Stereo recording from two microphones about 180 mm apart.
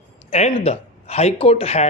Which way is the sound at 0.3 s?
40° left (ahead or behind).